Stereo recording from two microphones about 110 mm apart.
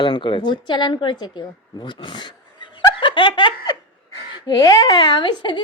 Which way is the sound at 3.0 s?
45° left (ahead or behind).